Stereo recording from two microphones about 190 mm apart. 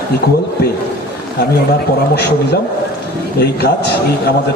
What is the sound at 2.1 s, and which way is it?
A man's voice, 60° left (ahead or behind).